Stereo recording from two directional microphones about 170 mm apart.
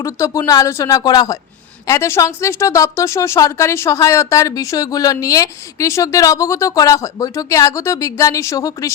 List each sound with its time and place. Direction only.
0.0 s speech: 20° left (ahead or behind)